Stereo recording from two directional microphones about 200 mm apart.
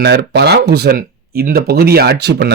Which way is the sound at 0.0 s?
55° right (ahead or behind).